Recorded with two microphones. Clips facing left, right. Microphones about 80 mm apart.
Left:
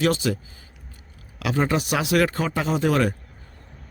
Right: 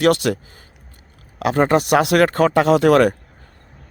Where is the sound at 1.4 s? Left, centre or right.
Right.